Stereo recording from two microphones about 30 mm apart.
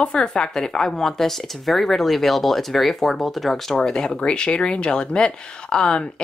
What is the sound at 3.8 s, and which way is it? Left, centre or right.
Speech, left.